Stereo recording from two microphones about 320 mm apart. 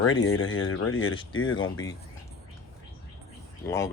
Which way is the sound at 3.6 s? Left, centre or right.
Centre.